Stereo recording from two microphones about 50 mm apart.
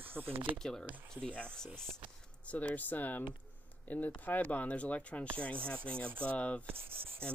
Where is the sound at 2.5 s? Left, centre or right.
Left.